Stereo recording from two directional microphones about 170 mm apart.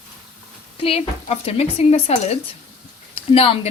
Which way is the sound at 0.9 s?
35° left (ahead or behind).